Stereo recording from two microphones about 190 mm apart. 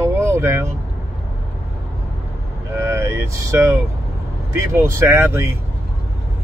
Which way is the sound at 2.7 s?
15° right (ahead or behind).